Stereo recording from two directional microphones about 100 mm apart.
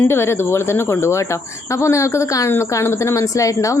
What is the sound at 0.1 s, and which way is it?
A woman's voice, 25° left (ahead or behind).